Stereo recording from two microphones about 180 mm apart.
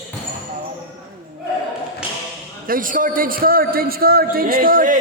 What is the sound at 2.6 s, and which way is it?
A man's voice, 50° right (ahead or behind).